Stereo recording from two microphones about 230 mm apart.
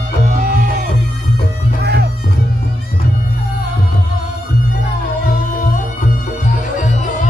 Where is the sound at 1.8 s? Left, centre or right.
Right.